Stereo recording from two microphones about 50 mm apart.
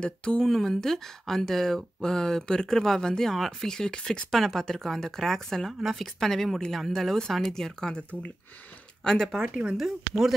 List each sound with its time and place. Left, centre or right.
0.0 s speech: centre
0.4 s speech: centre
4.3 s speech: centre
5.8 s a woman's voice: centre
6.1 s speech: centre
9.0 s speech: centre
9.4 s speech: centre
9.8 s speech: centre